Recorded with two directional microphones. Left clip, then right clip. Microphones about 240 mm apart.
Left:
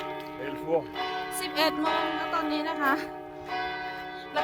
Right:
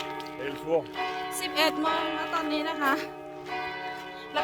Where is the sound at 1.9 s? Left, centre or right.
Left.